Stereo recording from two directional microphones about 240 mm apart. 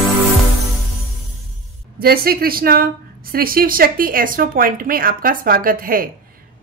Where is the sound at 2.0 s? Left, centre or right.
Right.